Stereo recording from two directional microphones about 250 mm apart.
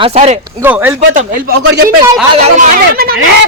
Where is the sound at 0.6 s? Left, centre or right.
Centre.